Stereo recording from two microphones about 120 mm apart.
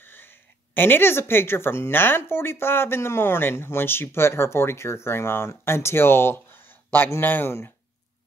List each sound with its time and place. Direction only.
0.0 s speech: 15° left (ahead or behind)